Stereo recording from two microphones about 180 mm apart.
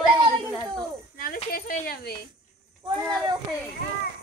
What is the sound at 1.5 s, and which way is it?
Speech, 55° left (ahead or behind).